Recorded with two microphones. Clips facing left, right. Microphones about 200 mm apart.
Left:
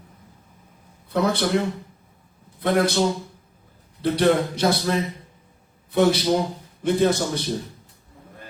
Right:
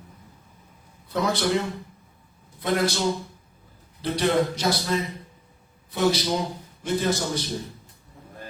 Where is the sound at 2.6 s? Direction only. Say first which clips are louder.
Left 3 dB; 60° left (ahead or behind).